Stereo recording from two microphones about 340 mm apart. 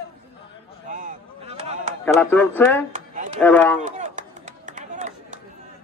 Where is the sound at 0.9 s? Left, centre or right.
Centre.